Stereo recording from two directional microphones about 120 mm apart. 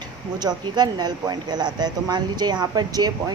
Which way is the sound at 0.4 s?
35° right (ahead or behind).